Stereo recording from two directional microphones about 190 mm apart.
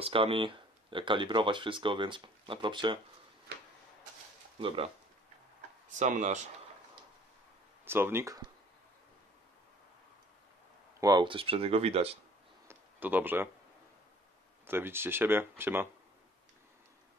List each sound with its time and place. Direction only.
0.0 s speech: 30° right (ahead or behind)
4.6 s speech: 30° right (ahead or behind)
5.9 s speech: 40° right (ahead or behind)
7.8 s speech: 10° right (ahead or behind)
11.0 s speech: 20° right (ahead or behind)
12.6 s a sound: 10° right (ahead or behind)
14.7 s speech: 10° right (ahead or behind)